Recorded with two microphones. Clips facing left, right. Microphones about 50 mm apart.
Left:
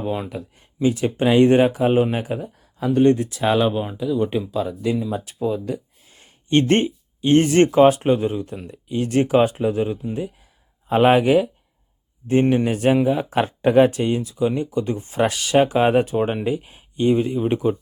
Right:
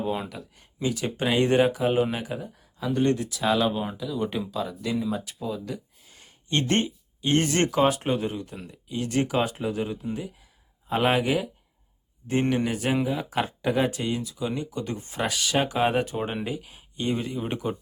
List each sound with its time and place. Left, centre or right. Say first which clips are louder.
0.3 s speech: left 8 dB; left
1.2 s speech: left 7 dB; centre
2.2 s speech: left 6 dB; left
2.6 s a sound: left 7 dB; left
2.9 s speech: left 8 dB; left
3.7 s speech: left 6 dB; centre
8.0 s speech: left 8 dB; centre
8.3 s speech: left 7 dB; left
10.8 s speech: left 8 dB; left
12.4 s speech: left 7 dB; centre
12.6 s speech: left 8 dB; left
15.5 s speech: left 8 dB; left
17.0 s speech: left 10 dB; centre